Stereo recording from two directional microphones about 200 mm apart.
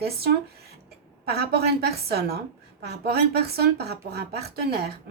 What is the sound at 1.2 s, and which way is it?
A woman's voice, 55° right (ahead or behind).